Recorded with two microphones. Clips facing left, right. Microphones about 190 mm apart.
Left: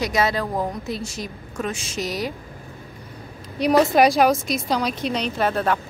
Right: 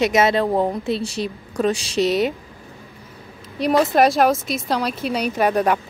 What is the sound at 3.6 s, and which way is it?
A woman's voice, centre (ahead or behind).